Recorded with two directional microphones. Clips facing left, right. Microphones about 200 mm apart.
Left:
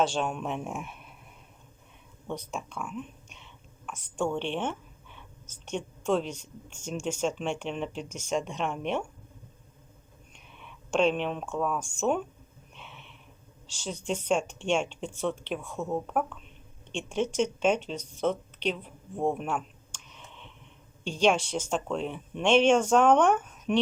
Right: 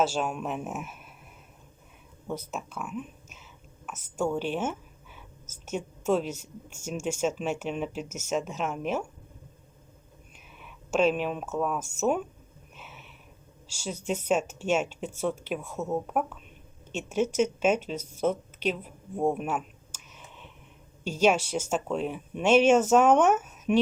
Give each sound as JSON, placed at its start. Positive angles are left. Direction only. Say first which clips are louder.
{"t": 0.0, "sound": "speech", "louder": "even", "side_deg": -5}
{"t": 2.2, "sound": "speech", "louder": "right 1 dB", "side_deg": -5}
{"t": 10.6, "sound": "speech", "louder": "right 1 dB", "side_deg": -5}
{"t": 12.7, "sound": "a sound", "louder": "even", "side_deg": -5}
{"t": 13.7, "sound": "speech", "louder": "right 1 dB", "side_deg": -10}
{"t": 18.2, "sound": "a sound", "louder": "right 1 dB", "side_deg": -5}
{"t": 21.0, "sound": "speech", "louder": "right 1 dB", "side_deg": -5}